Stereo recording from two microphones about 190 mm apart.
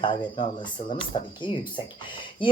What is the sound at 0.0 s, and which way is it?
Speech, 25° left (ahead or behind).